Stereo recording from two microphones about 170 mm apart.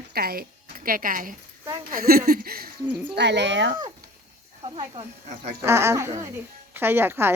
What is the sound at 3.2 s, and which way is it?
Speech, 90° right.